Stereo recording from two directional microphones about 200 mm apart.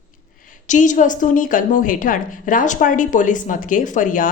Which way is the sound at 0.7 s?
40° left (ahead or behind).